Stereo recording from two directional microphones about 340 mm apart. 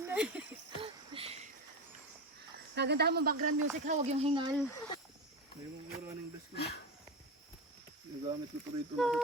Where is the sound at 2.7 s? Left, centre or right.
Right.